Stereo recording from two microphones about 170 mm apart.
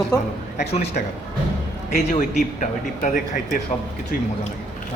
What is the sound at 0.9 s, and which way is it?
Speech, 50° left (ahead or behind).